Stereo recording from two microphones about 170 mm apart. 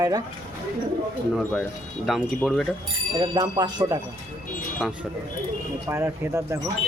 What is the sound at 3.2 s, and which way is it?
Speech, 25° right (ahead or behind).